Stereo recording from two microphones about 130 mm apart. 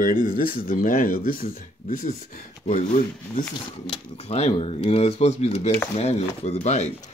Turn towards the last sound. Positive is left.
turn(degrees=60)  # may be behind; listen again after turning